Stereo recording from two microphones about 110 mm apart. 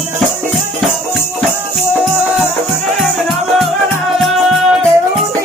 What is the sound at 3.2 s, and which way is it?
Music, centre (ahead or behind).